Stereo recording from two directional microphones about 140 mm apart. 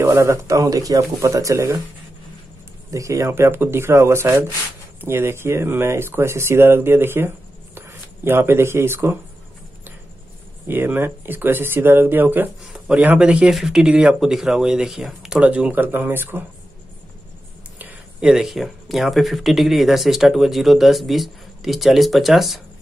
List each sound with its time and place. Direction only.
0.0 s speech: 20° right (ahead or behind)
2.9 s speech: 20° right (ahead or behind)
10.7 s speech: 15° right (ahead or behind)
17.7 s speech: 10° right (ahead or behind)